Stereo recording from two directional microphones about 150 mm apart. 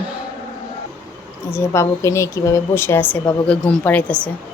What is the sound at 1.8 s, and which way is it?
A woman's voice, 20° left (ahead or behind).